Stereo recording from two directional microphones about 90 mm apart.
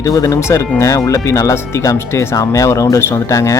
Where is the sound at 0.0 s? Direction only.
40° left (ahead or behind).